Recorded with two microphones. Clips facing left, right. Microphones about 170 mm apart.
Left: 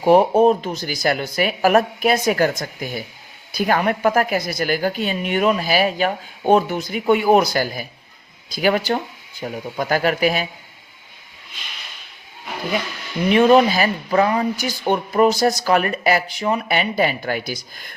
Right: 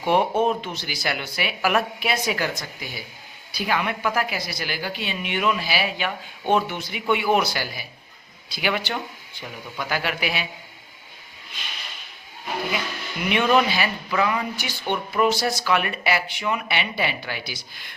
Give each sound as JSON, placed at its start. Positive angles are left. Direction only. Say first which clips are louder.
{"t": 0.0, "sound": "a woman's voice", "louder": "left 7 dB", "side_deg": 35}
{"t": 13.2, "sound": "speech", "louder": "left 7 dB", "side_deg": 35}